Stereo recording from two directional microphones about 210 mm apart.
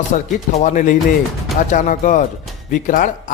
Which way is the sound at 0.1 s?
35° left (ahead or behind).